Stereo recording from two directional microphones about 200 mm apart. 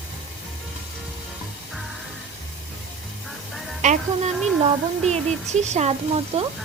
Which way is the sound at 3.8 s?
35° right (ahead or behind).